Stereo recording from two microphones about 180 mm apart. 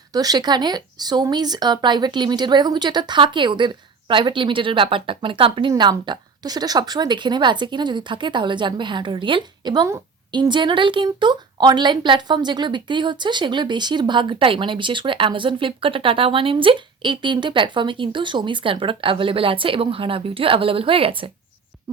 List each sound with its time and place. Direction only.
0.1 s speech: 20° right (ahead or behind)